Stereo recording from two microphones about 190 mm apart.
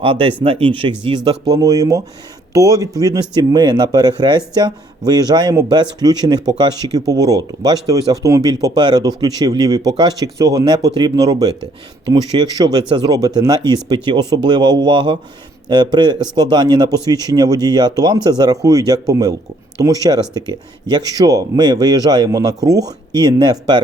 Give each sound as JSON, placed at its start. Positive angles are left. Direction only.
{"t": 0.0, "sound": "speech", "side_deg": -30}